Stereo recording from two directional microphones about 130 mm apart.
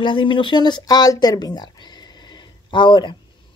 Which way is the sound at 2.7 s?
40° left (ahead or behind).